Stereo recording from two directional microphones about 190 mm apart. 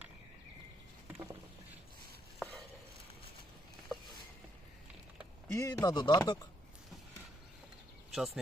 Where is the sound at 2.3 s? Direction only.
Centre (ahead or behind).